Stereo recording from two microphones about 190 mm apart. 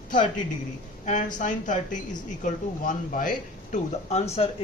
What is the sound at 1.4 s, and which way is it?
Speech, 40° left (ahead or behind).